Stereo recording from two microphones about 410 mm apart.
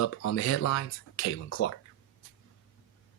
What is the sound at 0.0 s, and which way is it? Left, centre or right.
Speech, left.